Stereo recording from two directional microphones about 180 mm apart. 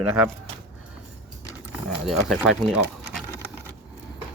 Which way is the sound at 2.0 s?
Centre (ahead or behind).